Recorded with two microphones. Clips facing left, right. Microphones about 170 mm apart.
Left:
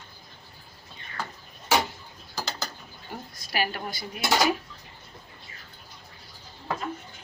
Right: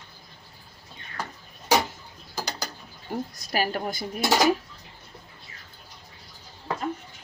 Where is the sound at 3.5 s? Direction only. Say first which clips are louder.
Right 3 dB; 40° right (ahead or behind).